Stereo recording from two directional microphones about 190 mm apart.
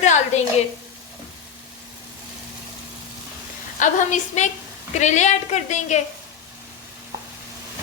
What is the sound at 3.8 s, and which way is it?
A woman's voice, 40° left (ahead or behind).